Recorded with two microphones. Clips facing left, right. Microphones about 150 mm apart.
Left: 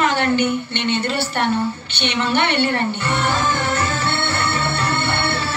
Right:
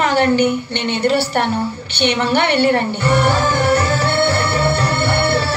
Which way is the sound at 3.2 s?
35° right (ahead or behind).